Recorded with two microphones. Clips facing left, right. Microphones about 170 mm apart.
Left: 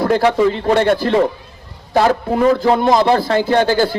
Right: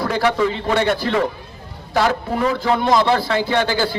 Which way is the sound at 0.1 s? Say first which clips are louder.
Left 4 dB; 35° left (ahead or behind).